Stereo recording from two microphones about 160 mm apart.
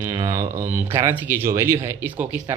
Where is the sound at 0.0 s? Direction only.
20° right (ahead or behind).